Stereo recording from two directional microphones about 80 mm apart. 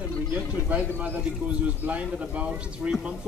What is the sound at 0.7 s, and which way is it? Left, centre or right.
Speech, centre.